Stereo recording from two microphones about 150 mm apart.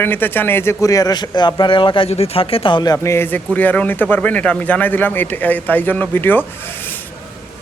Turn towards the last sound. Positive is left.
turn(degrees=15)  # may be behind; listen again after turning